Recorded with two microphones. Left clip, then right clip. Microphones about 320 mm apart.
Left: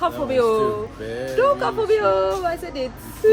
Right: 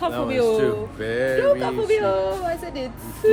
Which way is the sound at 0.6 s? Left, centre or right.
Centre.